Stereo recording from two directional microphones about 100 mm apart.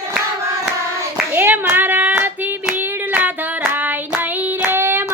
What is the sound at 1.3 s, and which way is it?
Hands, 20° right (ahead or behind).